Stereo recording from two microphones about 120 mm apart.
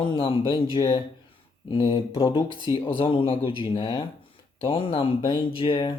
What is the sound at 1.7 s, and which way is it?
Speech, 45° left (ahead or behind).